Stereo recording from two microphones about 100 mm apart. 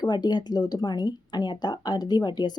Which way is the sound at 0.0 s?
45° left (ahead or behind).